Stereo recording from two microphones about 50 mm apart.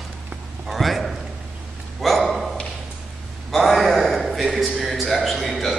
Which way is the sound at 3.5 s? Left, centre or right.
Centre.